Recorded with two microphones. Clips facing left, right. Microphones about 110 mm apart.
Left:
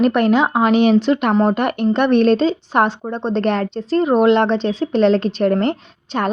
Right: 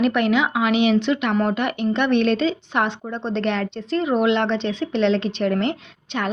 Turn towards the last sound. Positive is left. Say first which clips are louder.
# left 5 dB
turn(degrees=40)  # may be behind; listen again after turning